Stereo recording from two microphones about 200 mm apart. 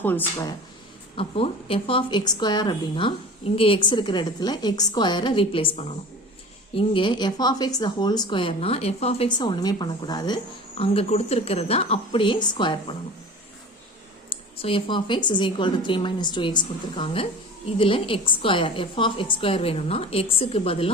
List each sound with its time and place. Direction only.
0.0 s speech: 10° left (ahead or behind)
1.1 s speech: 30° left (ahead or behind)
14.3 s speech: 25° left (ahead or behind)